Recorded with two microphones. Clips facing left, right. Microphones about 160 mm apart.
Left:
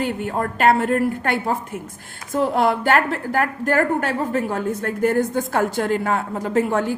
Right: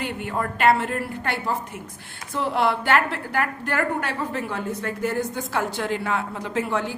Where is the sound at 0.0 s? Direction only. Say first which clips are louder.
Left 4 dB; 45° left (ahead or behind).